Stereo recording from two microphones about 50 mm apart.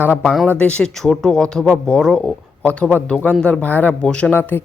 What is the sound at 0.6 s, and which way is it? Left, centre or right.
Speech, left.